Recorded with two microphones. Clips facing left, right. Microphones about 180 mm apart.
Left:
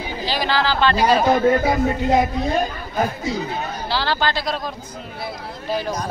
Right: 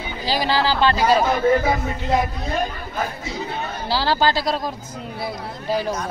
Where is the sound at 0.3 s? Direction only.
15° right (ahead or behind).